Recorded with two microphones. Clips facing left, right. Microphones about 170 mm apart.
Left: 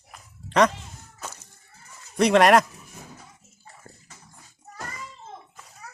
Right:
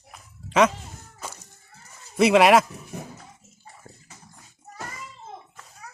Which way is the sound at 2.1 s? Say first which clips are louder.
Right 1 dB; 5° right (ahead or behind).